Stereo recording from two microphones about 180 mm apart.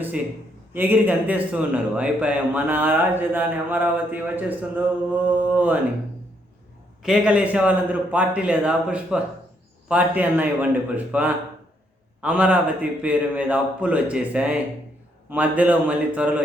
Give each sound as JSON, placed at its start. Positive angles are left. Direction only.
{"t": 0.7, "sound": "a man's voice", "side_deg": -10}
{"t": 7.0, "sound": "a man's voice", "side_deg": -5}